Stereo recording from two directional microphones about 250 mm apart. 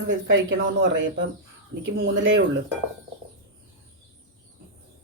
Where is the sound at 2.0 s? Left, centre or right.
Right.